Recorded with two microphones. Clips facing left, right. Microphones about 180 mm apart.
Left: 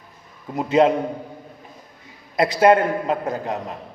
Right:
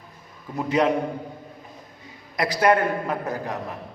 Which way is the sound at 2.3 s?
25° left (ahead or behind).